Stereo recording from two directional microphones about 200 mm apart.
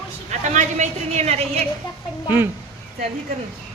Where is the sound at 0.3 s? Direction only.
35° right (ahead or behind).